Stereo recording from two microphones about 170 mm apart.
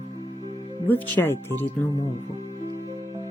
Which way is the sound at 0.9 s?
10° left (ahead or behind).